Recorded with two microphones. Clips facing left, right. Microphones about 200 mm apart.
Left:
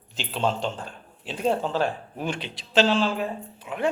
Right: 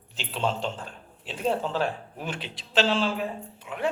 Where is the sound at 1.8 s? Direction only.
5° right (ahead or behind).